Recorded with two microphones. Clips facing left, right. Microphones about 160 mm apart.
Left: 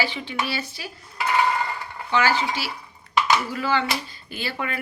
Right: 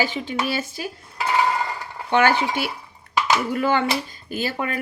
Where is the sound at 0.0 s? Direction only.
45° right (ahead or behind).